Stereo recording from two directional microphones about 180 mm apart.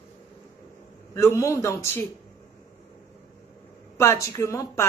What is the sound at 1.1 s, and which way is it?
Speech, 15° left (ahead or behind).